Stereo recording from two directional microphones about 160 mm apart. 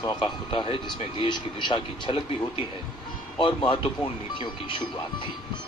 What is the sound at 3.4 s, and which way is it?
Speech, 30° left (ahead or behind).